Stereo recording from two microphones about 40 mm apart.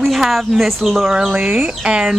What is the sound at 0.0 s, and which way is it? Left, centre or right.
Speech, centre.